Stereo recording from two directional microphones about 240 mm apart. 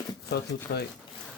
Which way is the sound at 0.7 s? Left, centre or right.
Left.